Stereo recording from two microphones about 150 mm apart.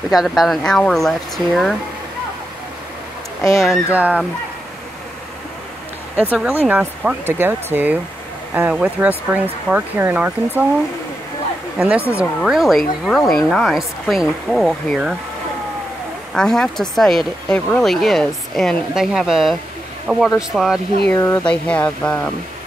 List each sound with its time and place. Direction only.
0.1 s speech: centre (ahead or behind)
3.6 s speech: 5° right (ahead or behind)
6.3 s speech: 5° right (ahead or behind)
11.8 s speech: 10° right (ahead or behind)
16.3 s speech: 5° left (ahead or behind)
21.1 s speech: 20° left (ahead or behind)
21.4 s speech: 10° left (ahead or behind)